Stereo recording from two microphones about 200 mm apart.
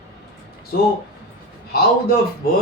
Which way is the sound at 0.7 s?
50° left (ahead or behind).